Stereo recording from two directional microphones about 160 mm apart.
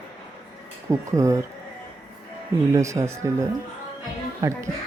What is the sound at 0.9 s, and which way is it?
Speech, 20° right (ahead or behind).